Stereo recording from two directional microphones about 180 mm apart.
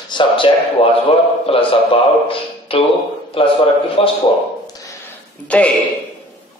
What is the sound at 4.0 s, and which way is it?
Speech, 30° left (ahead or behind).